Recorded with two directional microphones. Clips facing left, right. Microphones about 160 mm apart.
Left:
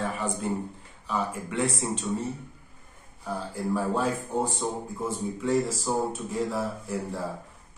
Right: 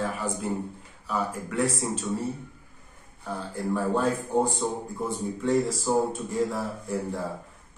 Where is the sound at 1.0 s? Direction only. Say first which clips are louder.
Even; 5° right (ahead or behind).